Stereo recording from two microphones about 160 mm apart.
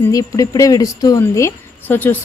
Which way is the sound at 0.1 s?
20° left (ahead or behind).